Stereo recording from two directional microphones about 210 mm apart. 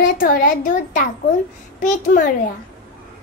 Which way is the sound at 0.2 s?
45° left (ahead or behind).